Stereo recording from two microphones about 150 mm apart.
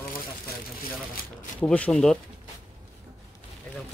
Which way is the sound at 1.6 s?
10° left (ahead or behind).